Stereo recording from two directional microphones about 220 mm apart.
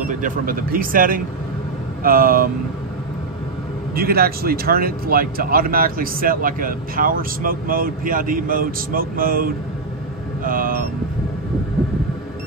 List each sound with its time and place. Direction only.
0.0 s speech: 40° right (ahead or behind)
3.9 s speech: 45° right (ahead or behind)